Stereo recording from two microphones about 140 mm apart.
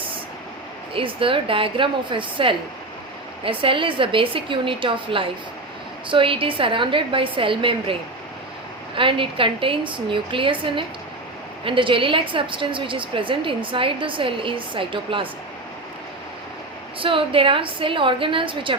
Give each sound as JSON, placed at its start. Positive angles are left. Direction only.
{"t": 0.9, "sound": "a woman's voice", "side_deg": -40}
{"t": 9.0, "sound": "a woman's voice", "side_deg": -40}
{"t": 17.0, "sound": "a woman's voice", "side_deg": -40}